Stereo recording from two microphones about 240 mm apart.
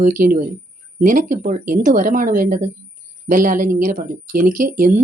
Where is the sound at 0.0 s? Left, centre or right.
Right.